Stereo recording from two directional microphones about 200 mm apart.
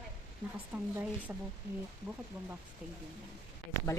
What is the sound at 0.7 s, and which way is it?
Speech, 5° right (ahead or behind).